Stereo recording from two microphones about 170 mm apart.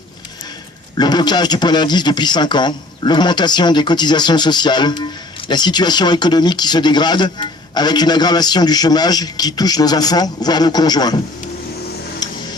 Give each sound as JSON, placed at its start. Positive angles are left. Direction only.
{"t": 0.9, "sound": "speech", "side_deg": 25}
{"t": 12.2, "sound": "tick-tock", "side_deg": 25}